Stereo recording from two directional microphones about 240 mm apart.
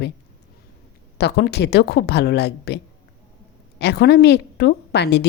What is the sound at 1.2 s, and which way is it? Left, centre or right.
A woman's voice, left.